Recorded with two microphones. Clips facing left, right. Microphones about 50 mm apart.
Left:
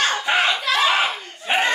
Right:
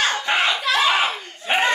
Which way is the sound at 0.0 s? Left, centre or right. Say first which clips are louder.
Left 1 dB; centre.